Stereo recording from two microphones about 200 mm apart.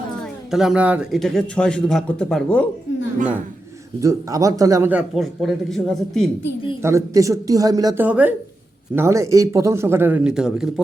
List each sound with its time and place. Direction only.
0.2 s speech: centre (ahead or behind)
4.0 s speech: 15° right (ahead or behind); by 6.2 s centre (ahead or behind)
6.8 s speech: 15° right (ahead or behind)